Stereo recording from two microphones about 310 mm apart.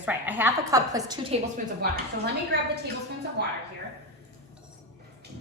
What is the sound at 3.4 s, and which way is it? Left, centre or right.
Speech, right.